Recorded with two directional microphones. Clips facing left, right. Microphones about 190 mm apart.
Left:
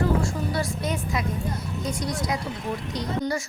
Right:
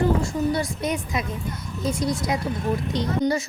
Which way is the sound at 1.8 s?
25° right (ahead or behind).